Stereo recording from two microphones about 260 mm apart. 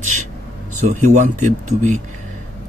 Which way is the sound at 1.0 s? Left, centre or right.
Right.